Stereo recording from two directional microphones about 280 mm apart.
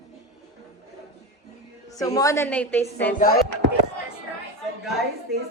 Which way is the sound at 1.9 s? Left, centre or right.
Centre.